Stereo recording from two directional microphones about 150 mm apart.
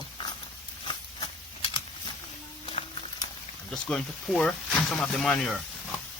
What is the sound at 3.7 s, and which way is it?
Speech, 5° left (ahead or behind).